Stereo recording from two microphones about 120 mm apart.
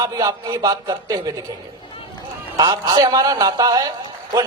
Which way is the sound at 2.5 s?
30° right (ahead or behind).